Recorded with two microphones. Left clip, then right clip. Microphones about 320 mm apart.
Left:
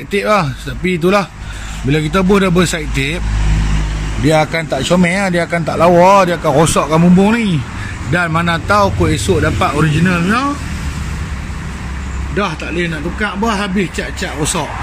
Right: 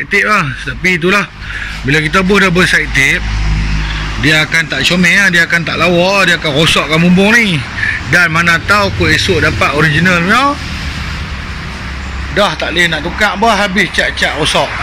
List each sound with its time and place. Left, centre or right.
0.1 s speech: centre
4.2 s speech: left
8.5 s a man's voice: centre
8.8 s speech: centre
12.4 s a man's voice: centre